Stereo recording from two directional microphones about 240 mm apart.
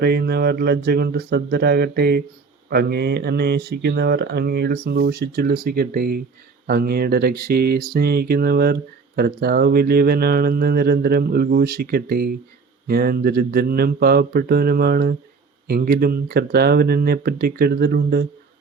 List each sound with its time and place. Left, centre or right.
0.0 s speech: right